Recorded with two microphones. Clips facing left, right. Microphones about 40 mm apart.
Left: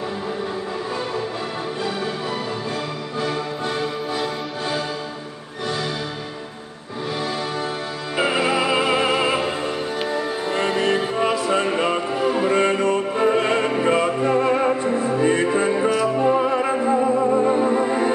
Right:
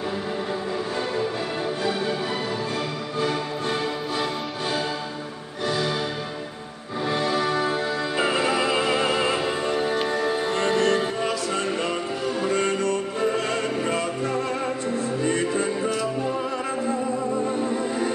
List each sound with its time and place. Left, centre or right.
8.2 s music: centre
10.5 s music: centre